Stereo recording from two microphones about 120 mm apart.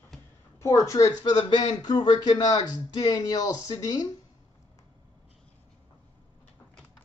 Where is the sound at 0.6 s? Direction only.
25° left (ahead or behind).